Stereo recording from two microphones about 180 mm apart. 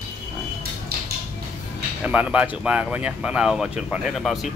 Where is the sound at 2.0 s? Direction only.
5° right (ahead or behind).